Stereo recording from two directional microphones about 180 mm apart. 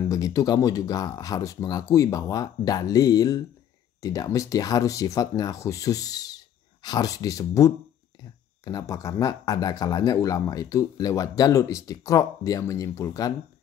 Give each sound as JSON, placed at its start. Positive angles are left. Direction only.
{"t": 0.1, "sound": "speech", "side_deg": 20}